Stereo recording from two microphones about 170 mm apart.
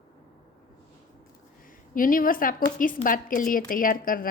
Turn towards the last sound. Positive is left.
turn(degrees=55)  # may be behind; listen again after turning